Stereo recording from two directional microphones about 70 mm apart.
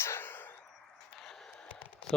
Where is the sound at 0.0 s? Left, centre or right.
Left.